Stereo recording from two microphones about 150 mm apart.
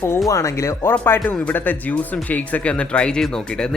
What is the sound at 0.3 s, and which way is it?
Speech, 20° left (ahead or behind).